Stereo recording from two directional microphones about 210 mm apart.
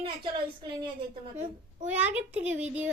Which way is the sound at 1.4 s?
35° right (ahead or behind).